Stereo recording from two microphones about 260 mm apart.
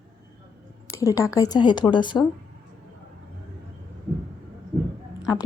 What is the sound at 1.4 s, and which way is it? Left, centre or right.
Speech, centre.